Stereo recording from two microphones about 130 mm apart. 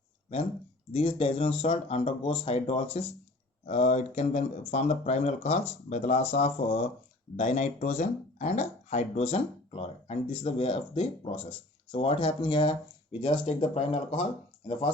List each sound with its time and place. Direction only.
0.9 s speech: 45° left (ahead or behind)
3.7 s speech: 60° left (ahead or behind); by 14.9 s 40° left (ahead or behind)